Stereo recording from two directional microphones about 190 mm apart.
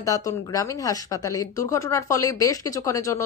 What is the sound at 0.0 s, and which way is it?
A woman's voice, 20° left (ahead or behind).